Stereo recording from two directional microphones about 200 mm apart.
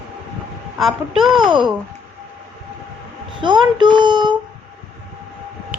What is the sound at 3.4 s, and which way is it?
Speech, 25° right (ahead or behind).